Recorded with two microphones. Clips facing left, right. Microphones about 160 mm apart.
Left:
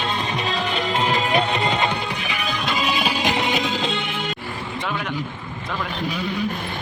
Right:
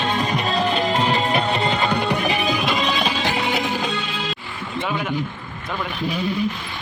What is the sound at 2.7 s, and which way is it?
Music, 5° left (ahead or behind).